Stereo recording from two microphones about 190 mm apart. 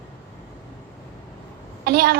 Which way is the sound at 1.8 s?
55° right (ahead or behind).